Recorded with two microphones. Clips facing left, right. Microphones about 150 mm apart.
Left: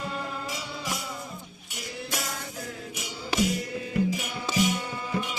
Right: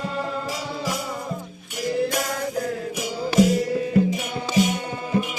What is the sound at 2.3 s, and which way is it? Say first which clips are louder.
Music: right 12 dB; 55° right (ahead or behind).